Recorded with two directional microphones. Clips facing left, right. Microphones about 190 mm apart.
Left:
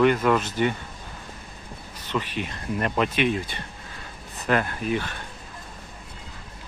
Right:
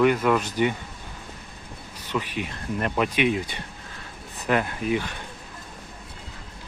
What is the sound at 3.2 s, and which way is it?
Speech, 10° right (ahead or behind).